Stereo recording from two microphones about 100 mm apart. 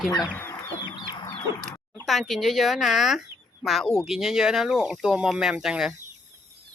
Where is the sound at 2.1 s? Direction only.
Centre (ahead or behind).